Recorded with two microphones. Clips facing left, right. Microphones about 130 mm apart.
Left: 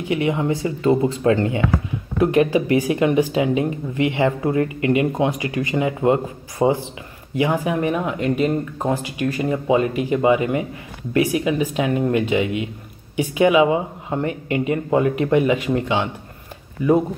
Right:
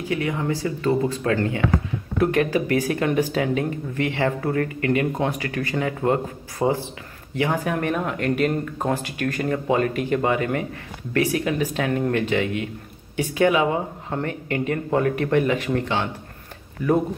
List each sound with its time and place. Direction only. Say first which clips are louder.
0.1 s speech: left 4 dB; 20° left (ahead or behind)